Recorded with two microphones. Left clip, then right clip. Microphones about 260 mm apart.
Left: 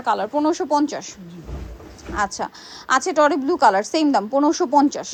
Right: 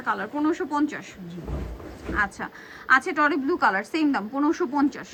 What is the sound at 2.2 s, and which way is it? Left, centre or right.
A woman's voice, left.